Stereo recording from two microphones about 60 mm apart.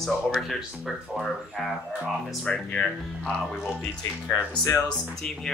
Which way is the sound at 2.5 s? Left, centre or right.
Centre.